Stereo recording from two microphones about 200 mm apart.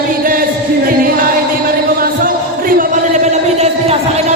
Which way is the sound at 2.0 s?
45° right (ahead or behind).